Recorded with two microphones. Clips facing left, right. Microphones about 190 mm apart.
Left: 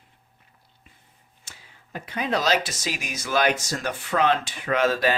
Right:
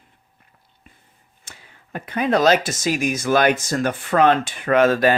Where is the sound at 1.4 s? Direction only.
55° right (ahead or behind).